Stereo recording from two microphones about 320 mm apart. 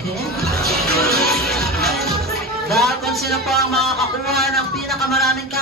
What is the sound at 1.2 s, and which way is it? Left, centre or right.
Music, centre.